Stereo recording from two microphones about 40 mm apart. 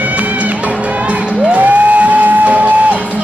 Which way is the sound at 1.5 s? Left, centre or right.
Right.